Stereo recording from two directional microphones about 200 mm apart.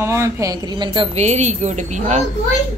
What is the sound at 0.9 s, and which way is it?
Speech, 30° right (ahead or behind).